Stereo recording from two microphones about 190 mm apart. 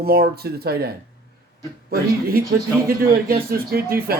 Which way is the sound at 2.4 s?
50° right (ahead or behind).